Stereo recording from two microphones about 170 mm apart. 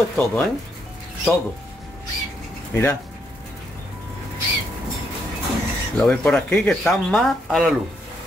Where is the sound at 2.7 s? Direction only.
15° left (ahead or behind).